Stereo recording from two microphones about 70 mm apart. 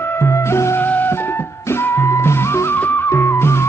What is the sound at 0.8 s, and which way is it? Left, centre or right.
Music, left.